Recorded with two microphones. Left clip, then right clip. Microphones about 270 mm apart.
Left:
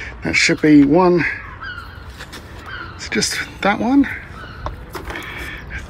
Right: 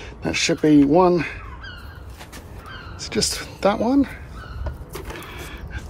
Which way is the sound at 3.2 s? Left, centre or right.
Centre.